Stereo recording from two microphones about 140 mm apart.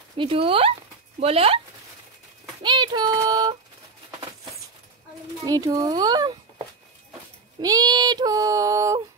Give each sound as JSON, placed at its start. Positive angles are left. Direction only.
{"t": 0.2, "sound": "speech", "side_deg": -40}
{"t": 2.6, "sound": "child singing", "side_deg": -35}
{"t": 5.4, "sound": "female singing", "side_deg": -25}
{"t": 7.6, "sound": "female singing", "side_deg": -30}